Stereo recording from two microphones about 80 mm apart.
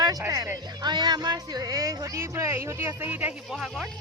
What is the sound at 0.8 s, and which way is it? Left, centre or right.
Speech, right.